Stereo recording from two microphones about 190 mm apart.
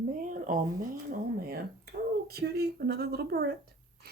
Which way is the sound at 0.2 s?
45° right (ahead or behind).